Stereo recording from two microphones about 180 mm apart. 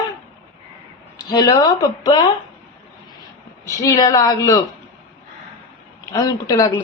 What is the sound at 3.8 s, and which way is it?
Speech, 20° left (ahead or behind).